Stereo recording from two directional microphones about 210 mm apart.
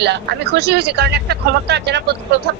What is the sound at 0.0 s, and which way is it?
A woman's voice, 50° right (ahead or behind).